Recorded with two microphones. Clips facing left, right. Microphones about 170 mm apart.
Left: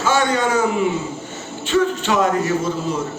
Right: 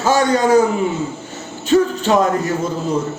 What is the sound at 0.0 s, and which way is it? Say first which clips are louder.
Speech: right 3 dB; 40° right (ahead or behind).